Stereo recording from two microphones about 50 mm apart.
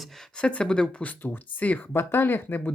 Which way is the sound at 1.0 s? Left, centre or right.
Left.